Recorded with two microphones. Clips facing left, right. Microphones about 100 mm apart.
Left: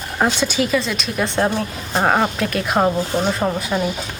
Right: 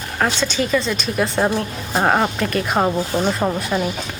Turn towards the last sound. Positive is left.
turn(degrees=0)  # may be behind; listen again after turning